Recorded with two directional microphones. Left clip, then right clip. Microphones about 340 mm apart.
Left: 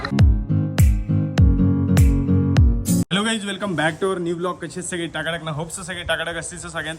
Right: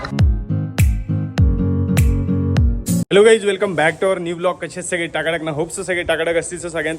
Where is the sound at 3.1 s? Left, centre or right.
Centre.